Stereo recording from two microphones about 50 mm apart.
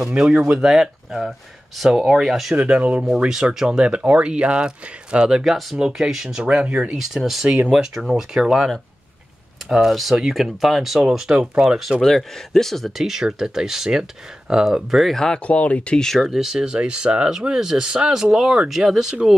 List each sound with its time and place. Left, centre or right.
0.2 s speech: centre
2.5 s speech: right
3.5 s speech: centre
5.4 s speech: centre
12.0 s speech: centre
15.1 s speech: centre
15.4 s speech: left
16.2 s speech: centre